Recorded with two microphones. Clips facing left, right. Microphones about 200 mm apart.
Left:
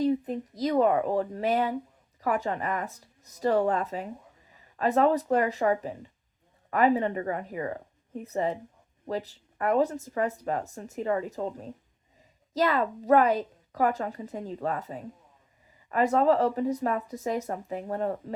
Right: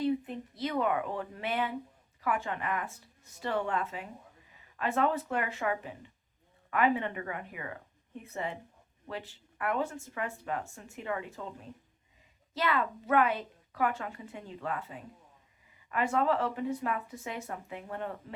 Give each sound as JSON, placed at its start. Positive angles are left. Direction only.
{"t": 0.0, "sound": "speech", "side_deg": 40}